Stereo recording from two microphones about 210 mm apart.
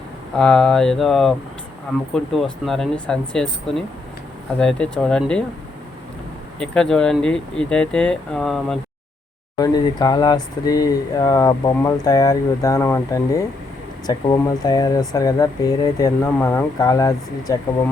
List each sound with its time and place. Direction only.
0.3 s speech: 5° left (ahead or behind)
6.6 s speech: 5° left (ahead or behind)
9.6 s speech: 20° left (ahead or behind)